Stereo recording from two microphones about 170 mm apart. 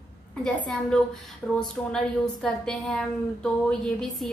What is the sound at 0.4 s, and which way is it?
Female singing, 5° left (ahead or behind).